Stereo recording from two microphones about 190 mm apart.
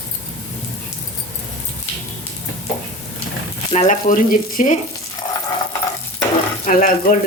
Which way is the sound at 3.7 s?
40° left (ahead or behind).